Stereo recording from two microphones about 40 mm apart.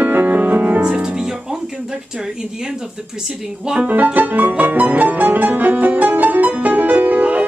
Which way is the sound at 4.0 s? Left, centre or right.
Right.